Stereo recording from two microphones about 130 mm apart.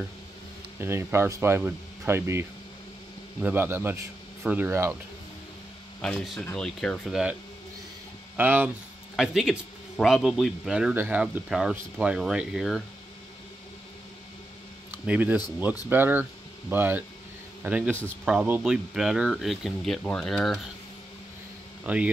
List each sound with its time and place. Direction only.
0.7 s a man's voice: 20° right (ahead or behind)
5.9 s speech: 5° left (ahead or behind)
8.4 s a man's voice: 15° right (ahead or behind)
14.9 s a man's voice: 10° right (ahead or behind)
21.8 s a man's voice: 10° right (ahead or behind)